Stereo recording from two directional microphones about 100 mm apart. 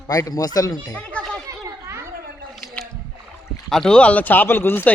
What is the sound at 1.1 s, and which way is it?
Chatter, 10° left (ahead or behind).